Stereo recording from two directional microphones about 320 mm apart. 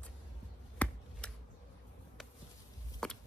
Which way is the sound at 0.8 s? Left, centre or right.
Centre.